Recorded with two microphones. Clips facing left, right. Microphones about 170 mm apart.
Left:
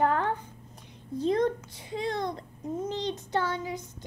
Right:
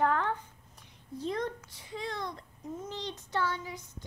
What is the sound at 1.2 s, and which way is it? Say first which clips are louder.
Child singing: left 8 dB; 25° left (ahead or behind).